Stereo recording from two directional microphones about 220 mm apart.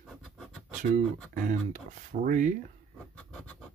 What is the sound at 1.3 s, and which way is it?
Speech, 35° right (ahead or behind).